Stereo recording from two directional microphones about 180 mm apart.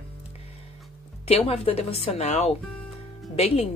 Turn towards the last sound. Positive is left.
turn(degrees=35)  # may be behind; listen again after turning